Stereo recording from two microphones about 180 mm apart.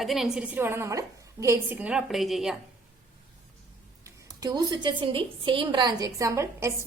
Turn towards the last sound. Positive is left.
turn(degrees=-15)  # may be behind; listen again after turning